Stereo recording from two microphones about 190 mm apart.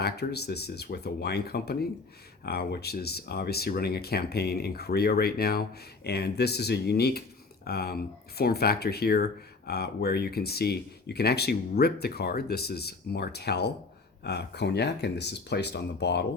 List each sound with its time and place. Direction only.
0.0 s speech: 60° left (ahead or behind)